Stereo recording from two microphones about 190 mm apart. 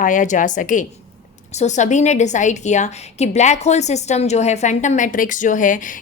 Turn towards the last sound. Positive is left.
turn(degrees=45)  # may be behind; listen again after turning